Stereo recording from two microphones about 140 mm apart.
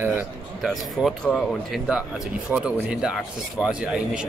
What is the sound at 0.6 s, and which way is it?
Speech, centre (ahead or behind).